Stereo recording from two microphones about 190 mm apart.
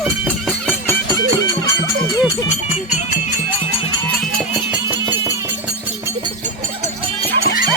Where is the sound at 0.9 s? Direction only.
15° left (ahead or behind).